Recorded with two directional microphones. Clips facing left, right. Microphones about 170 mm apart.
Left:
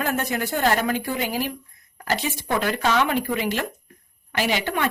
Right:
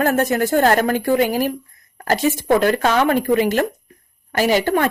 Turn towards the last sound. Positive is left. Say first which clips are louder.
# right 7 dB
turn(degrees=-45)  # may be behind; listen again after turning